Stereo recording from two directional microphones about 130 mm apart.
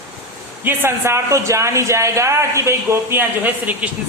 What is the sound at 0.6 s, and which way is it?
A man's voice, 15° right (ahead or behind).